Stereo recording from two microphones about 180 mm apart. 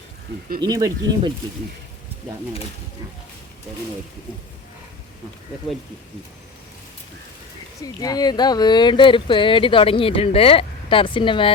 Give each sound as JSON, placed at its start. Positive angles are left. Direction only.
{"t": 0.6, "sound": "speech", "side_deg": -20}
{"t": 7.8, "sound": "speech", "side_deg": 20}